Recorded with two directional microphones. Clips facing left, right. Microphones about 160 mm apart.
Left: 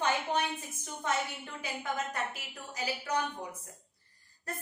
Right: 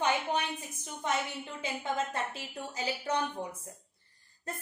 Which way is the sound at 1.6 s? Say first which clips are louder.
Right 2 dB; 25° right (ahead or behind).